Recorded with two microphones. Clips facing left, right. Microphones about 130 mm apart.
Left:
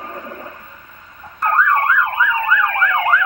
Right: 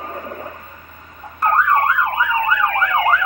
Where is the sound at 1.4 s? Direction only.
15° right (ahead or behind).